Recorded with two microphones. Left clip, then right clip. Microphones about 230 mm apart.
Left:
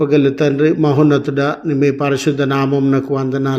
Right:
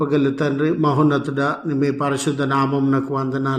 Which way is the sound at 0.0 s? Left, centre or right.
Left.